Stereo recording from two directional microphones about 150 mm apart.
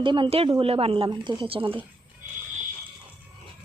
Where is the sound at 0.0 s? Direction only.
35° right (ahead or behind).